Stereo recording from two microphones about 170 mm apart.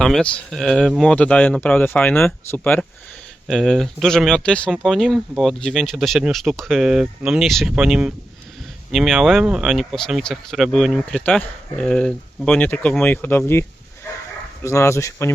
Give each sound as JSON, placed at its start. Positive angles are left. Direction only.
{"t": 0.0, "sound": "speech", "side_deg": 5}
{"t": 3.4, "sound": "speech", "side_deg": 0}